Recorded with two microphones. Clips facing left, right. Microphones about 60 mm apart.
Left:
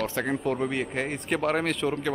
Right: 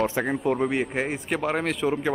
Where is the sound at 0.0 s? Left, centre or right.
Centre.